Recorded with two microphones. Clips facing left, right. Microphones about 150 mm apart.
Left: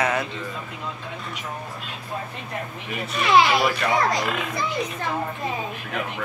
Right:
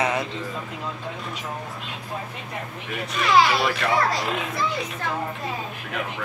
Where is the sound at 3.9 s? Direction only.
20° left (ahead or behind).